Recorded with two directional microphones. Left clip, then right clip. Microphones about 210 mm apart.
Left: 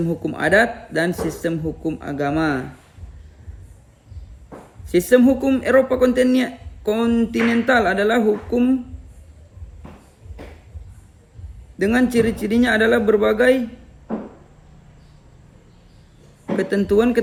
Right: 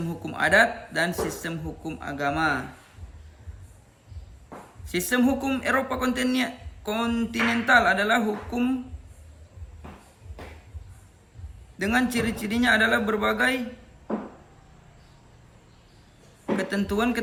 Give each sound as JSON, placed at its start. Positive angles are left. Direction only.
{"t": 0.0, "sound": "speech", "side_deg": -15}
{"t": 4.9, "sound": "speech", "side_deg": -15}
{"t": 11.8, "sound": "speech", "side_deg": -15}
{"t": 16.6, "sound": "speech", "side_deg": -15}